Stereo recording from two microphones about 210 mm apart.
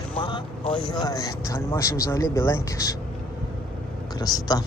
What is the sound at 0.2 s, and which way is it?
Vehicle, 25° left (ahead or behind).